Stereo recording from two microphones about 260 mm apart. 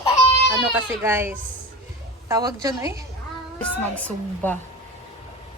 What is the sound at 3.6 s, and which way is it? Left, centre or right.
Speech, centre.